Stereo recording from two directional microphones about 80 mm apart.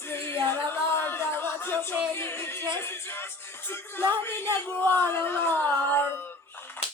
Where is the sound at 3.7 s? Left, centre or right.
Left.